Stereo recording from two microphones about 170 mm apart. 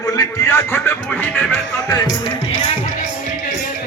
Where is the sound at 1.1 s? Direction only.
10° left (ahead or behind).